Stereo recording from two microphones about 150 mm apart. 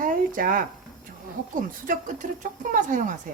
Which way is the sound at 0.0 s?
65° right (ahead or behind).